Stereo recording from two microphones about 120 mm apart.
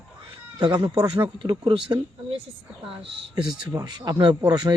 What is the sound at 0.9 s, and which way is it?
Speech, 35° right (ahead or behind).